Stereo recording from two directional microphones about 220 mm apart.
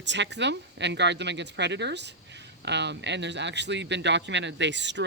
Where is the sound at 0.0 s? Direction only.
55° right (ahead or behind).